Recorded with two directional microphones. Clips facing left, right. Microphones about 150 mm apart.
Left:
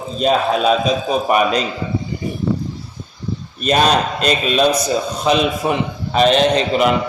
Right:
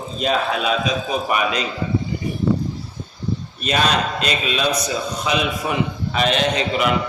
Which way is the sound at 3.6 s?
40° left (ahead or behind).